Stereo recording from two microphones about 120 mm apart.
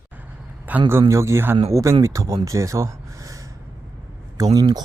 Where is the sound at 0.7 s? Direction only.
15° right (ahead or behind).